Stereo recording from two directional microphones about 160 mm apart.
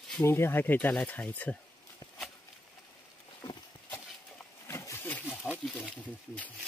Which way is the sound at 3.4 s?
25° left (ahead or behind).